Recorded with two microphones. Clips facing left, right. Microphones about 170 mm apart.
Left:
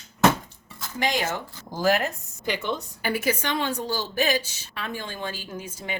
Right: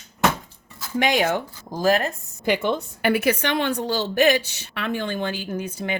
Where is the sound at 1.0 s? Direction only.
65° right (ahead or behind).